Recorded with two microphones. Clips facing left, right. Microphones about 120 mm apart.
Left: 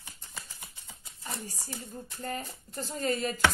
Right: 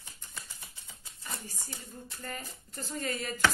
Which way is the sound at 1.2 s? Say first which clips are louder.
Left 4 dB; 30° left (ahead or behind).